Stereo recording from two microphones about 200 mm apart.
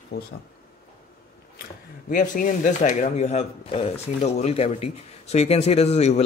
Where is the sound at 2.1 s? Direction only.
40° left (ahead or behind).